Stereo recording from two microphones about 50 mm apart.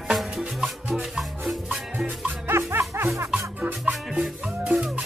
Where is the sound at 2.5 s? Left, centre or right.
Right.